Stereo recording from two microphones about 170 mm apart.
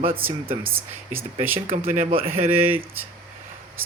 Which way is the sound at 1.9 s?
50° right (ahead or behind).